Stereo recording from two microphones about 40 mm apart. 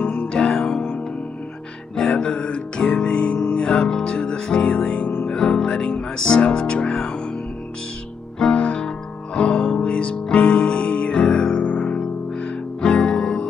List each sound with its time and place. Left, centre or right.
0.3 s music: left
2.1 s music: left
5.2 s music: centre
8.5 s music: left